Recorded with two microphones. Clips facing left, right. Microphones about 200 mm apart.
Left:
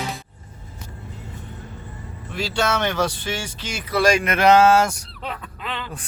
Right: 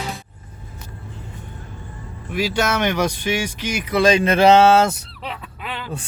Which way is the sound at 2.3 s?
15° right (ahead or behind).